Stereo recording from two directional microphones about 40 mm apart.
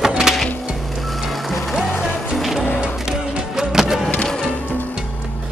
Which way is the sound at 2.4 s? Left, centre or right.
Centre.